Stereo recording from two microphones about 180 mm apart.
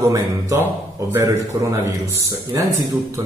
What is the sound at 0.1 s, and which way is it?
A man's voice, 15° right (ahead or behind).